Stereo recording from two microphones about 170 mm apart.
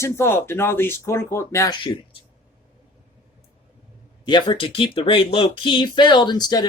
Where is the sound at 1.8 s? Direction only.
30° left (ahead or behind).